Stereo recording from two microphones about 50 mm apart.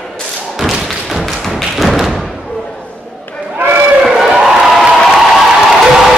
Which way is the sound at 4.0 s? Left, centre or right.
Centre.